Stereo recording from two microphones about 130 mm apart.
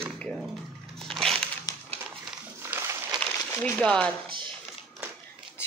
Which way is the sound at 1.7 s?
30° left (ahead or behind).